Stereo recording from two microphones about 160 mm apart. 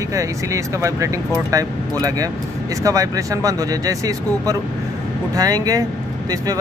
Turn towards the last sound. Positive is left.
turn(degrees=-20)  # may be behind; listen again after turning